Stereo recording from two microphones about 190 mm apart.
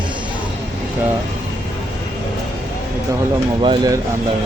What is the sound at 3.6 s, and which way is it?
Speech, 25° right (ahead or behind).